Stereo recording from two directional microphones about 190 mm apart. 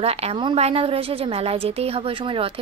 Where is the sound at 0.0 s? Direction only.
30° right (ahead or behind).